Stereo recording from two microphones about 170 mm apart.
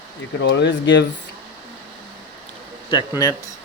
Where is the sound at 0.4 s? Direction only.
90° left.